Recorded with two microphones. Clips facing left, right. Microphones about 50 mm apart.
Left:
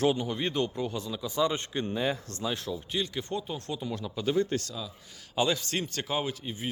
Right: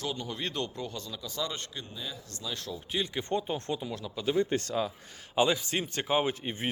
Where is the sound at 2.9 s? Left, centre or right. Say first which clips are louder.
Right 3 dB; centre.